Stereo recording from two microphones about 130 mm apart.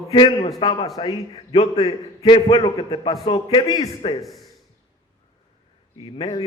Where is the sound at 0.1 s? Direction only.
40° left (ahead or behind).